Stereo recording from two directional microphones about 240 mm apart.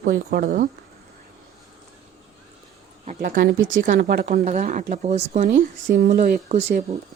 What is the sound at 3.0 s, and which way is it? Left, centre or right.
Speech, right.